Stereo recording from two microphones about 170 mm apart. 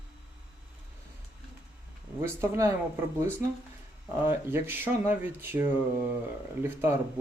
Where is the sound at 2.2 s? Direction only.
15° right (ahead or behind).